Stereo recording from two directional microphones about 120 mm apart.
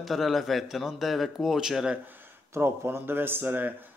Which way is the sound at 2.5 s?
20° right (ahead or behind).